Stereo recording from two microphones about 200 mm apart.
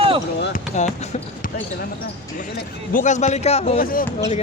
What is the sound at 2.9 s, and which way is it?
Speech, 35° left (ahead or behind).